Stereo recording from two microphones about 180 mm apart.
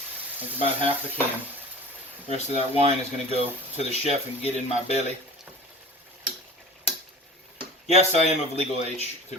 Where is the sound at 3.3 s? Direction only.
35° left (ahead or behind).